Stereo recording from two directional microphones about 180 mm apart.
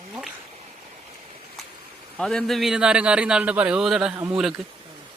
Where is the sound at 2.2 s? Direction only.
Centre (ahead or behind).